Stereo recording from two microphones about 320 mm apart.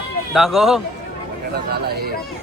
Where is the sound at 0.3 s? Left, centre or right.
Centre.